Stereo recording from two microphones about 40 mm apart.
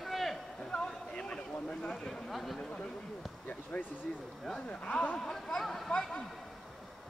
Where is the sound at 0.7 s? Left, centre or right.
Left.